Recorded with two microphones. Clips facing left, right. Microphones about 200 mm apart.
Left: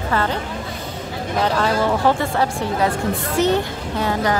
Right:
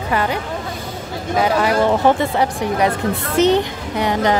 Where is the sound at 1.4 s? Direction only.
10° right (ahead or behind).